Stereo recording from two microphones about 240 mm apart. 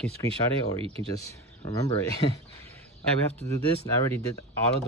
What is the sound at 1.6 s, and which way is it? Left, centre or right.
Speech, centre.